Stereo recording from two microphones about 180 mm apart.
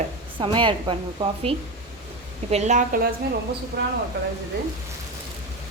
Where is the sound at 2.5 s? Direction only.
40° right (ahead or behind).